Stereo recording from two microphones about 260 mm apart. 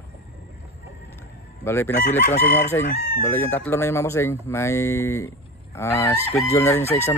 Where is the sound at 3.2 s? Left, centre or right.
Centre.